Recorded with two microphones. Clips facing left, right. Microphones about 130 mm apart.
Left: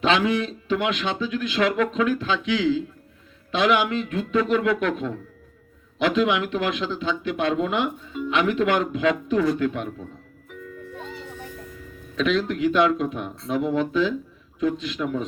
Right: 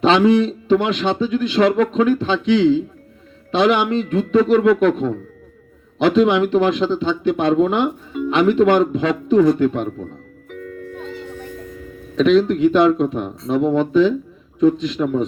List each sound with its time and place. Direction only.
0.0 s speech: 30° right (ahead or behind)
12.1 s speech: 35° right (ahead or behind)